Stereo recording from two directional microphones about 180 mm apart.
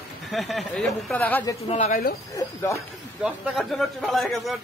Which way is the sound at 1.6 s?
40° left (ahead or behind).